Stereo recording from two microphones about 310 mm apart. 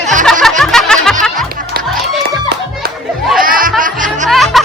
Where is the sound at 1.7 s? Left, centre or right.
Right.